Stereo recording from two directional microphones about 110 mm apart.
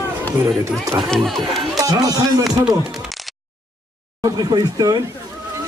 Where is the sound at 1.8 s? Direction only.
30° right (ahead or behind).